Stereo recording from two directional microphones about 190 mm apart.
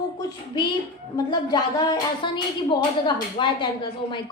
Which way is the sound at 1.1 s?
20° left (ahead or behind).